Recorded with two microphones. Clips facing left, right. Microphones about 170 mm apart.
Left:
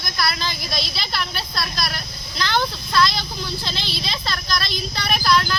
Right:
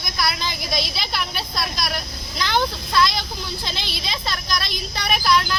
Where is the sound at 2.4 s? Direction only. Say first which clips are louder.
Right 1 dB; 15° right (ahead or behind).